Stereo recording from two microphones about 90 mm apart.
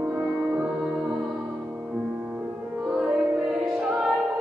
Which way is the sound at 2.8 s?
10° right (ahead or behind).